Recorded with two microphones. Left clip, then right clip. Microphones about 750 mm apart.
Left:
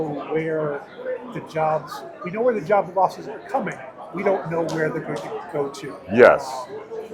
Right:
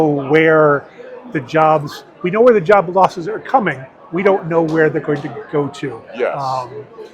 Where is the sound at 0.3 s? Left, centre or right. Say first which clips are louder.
Right 14 dB; right.